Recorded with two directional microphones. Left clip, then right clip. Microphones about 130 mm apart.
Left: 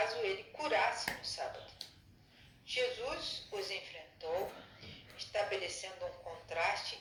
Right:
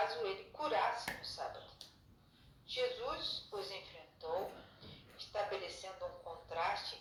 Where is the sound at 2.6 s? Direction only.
45° left (ahead or behind).